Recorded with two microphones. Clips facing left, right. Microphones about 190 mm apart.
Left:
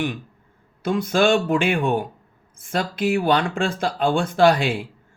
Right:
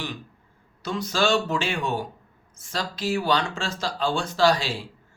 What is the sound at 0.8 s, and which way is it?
Speech, 55° left (ahead or behind).